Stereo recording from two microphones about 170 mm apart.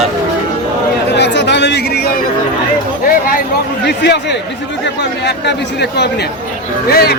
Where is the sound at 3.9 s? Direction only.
85° left.